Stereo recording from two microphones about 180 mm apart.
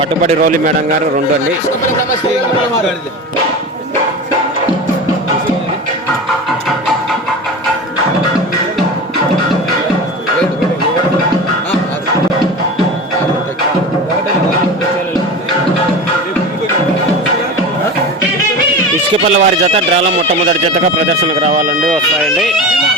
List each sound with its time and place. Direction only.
19.3 s speech: 35° right (ahead or behind)
21.1 s speech: 40° right (ahead or behind)
22.4 s speech: centre (ahead or behind)